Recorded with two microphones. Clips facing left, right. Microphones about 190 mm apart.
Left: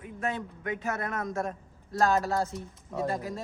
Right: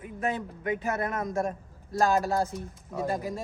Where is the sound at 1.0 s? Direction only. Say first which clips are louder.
Right 3 dB; 20° right (ahead or behind).